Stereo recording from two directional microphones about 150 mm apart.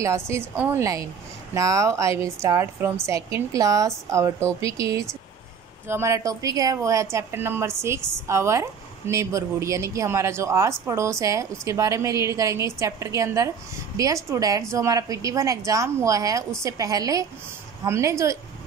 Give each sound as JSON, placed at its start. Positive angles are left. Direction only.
{"t": 0.3, "sound": "a woman's voice", "side_deg": -15}